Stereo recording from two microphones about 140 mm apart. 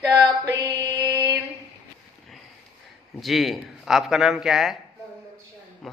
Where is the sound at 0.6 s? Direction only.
20° right (ahead or behind).